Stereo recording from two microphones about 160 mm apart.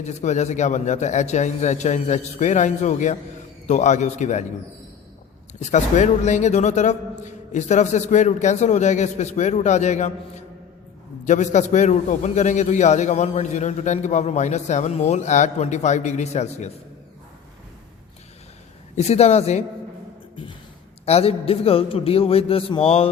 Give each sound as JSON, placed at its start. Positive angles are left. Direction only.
{"t": 0.0, "sound": "a man's voice", "side_deg": 45}
{"t": 5.5, "sound": "a man's voice", "side_deg": 45}
{"t": 11.3, "sound": "a man's voice", "side_deg": 50}
{"t": 18.9, "sound": "a man's voice", "side_deg": 40}
{"t": 21.0, "sound": "a man's voice", "side_deg": 40}